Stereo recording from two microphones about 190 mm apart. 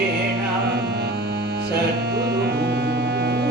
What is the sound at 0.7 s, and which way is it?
Music, 60° right (ahead or behind).